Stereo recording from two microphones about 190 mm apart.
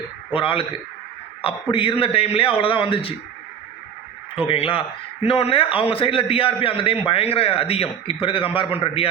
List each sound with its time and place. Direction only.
0.3 s a man's voice: 30° left (ahead or behind)
4.4 s a man's voice: 30° left (ahead or behind)